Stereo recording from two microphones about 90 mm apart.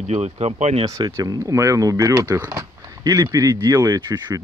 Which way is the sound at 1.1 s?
35° right (ahead or behind).